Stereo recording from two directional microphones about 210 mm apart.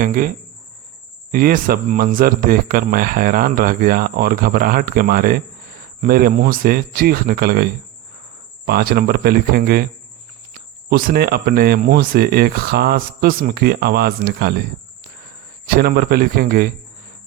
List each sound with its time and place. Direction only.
0.0 s a man's voice: 40° right (ahead or behind)
15.6 s a man's voice: 45° right (ahead or behind)